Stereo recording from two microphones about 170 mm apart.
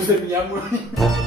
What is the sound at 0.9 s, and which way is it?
Speech, centre (ahead or behind).